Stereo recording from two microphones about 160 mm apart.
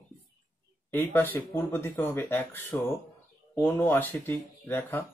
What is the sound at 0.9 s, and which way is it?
Speech, 15° left (ahead or behind).